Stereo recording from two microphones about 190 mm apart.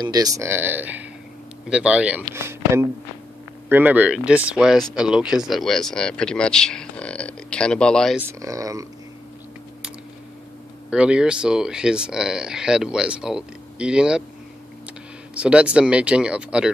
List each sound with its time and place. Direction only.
0.0 s speech: 20° right (ahead or behind); by 8.2 s 5° left (ahead or behind)
8.2 s speech: 15° right (ahead or behind)
10.9 s speech: 5° right (ahead or behind)
15.3 s speech: 5° right (ahead or behind)